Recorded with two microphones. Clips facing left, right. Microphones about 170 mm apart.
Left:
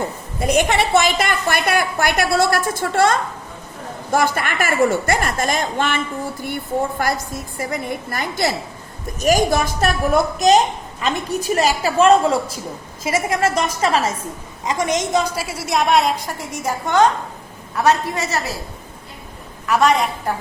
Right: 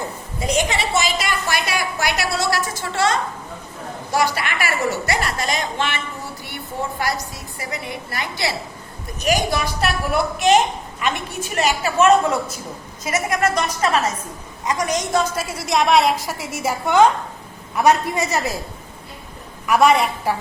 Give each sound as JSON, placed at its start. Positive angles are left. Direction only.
{"t": 0.3, "sound": "a woman's voice", "side_deg": 55}
{"t": 7.0, "sound": "a woman's voice", "side_deg": 50}
{"t": 15.4, "sound": "a woman's voice", "side_deg": 10}
{"t": 19.6, "sound": "a woman's voice", "side_deg": -10}